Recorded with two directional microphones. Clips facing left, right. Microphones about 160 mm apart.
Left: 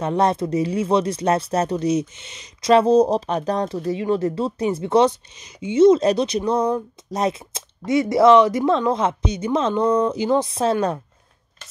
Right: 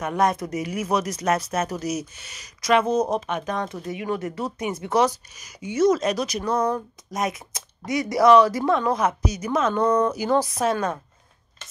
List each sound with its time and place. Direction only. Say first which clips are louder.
0.0 s speech: left 3 dB; 30° left (ahead or behind)
9.8 s speech: left 1 dB; 10° left (ahead or behind)
10.1 s speech: left 2 dB; 25° left (ahead or behind)